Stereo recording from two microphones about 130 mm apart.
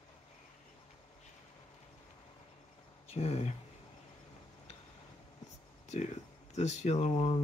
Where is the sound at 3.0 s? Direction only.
50° left (ahead or behind).